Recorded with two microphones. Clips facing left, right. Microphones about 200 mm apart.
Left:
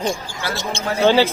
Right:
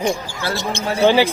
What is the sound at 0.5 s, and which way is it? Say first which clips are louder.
Speech: right 1 dB; 15° right (ahead or behind).